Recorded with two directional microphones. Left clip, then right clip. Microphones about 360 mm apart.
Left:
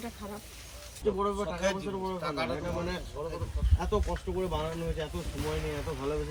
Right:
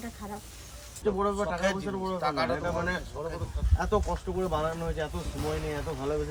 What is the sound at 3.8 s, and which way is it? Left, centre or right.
Speech, centre.